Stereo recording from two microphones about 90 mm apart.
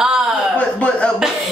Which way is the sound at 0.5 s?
15° left (ahead or behind).